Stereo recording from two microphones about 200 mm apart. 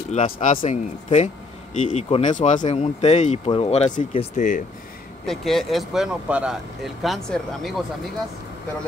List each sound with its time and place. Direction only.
0.1 s speech: 35° left (ahead or behind)
5.2 s speech: centre (ahead or behind)